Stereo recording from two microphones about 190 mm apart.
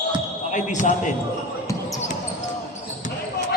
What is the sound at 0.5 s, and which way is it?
Speech, 40° left (ahead or behind).